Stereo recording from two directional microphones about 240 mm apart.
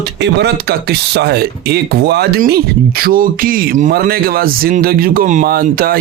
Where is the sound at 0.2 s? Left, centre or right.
Right.